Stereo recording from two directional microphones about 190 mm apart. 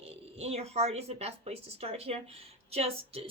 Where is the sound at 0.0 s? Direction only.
35° right (ahead or behind).